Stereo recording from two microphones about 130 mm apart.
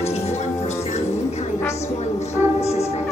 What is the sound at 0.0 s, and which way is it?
Music, 55° left (ahead or behind).